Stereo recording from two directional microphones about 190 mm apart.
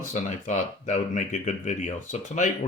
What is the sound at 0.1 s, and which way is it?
Speech, 40° left (ahead or behind).